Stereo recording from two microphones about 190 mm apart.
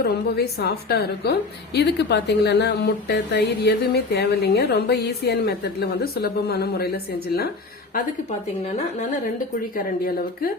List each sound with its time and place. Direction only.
0.0 s a woman's voice: 55° left (ahead or behind)
7.9 s a woman's voice: 35° left (ahead or behind)
9.7 s speech: 50° left (ahead or behind)